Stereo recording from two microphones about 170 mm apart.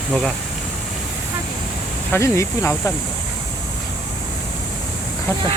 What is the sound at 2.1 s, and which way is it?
Speech, 15° left (ahead or behind).